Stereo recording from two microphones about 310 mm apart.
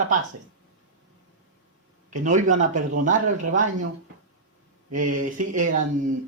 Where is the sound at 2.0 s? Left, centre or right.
Right.